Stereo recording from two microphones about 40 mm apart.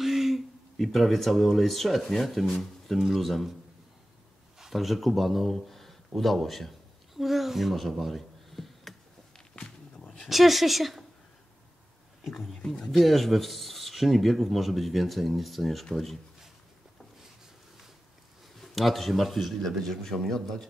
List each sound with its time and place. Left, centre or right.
0.0 s a sound: centre
0.8 s speech: centre
4.6 s speech: centre
8.0 s a sound: centre
10.2 s speech: centre
12.2 s speech: centre
12.6 s speech: centre
12.9 s speech: centre
18.6 s a man's voice: centre